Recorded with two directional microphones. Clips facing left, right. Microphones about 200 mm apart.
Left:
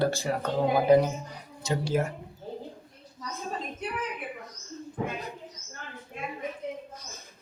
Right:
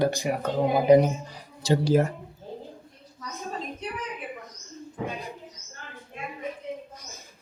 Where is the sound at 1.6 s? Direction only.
40° right (ahead or behind).